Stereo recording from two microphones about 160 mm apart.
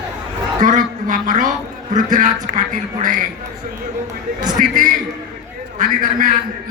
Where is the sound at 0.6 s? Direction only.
55° right (ahead or behind).